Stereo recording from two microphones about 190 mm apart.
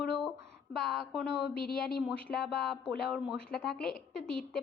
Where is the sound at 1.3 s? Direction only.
60° left (ahead or behind).